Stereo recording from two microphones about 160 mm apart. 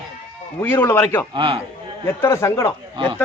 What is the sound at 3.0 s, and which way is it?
Speech, 30° right (ahead or behind).